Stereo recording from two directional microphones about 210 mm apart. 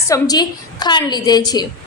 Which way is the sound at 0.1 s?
20° left (ahead or behind).